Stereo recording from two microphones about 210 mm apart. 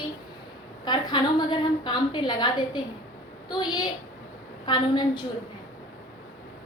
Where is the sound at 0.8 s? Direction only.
20° left (ahead or behind).